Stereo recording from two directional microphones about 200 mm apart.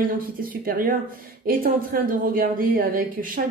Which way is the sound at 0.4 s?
45° right (ahead or behind).